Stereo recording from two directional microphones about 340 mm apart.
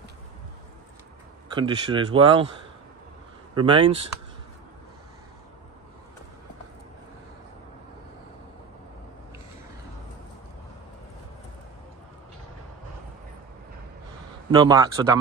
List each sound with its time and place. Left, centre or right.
1.5 s speech: centre
3.5 s speech: centre
14.5 s speech: centre